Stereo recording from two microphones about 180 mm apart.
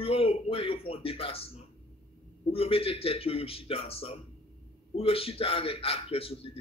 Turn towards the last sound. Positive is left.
turn(degrees=30)  # may be behind; listen again after turning